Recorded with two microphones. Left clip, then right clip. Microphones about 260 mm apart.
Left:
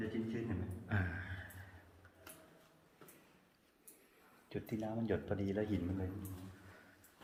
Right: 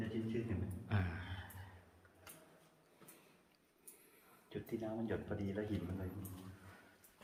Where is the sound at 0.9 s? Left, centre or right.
Centre.